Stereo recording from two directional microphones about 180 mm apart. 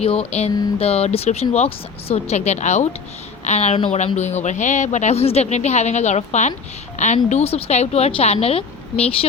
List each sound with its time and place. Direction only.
0.0 s speech: 35° left (ahead or behind)